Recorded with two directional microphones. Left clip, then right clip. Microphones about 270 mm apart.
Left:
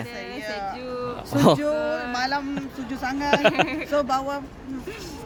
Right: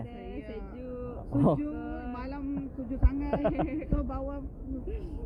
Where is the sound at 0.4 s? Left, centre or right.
Left.